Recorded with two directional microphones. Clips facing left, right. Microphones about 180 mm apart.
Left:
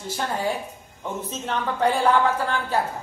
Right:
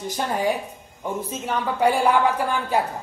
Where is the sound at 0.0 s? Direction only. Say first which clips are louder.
Right 3 dB; 15° right (ahead or behind).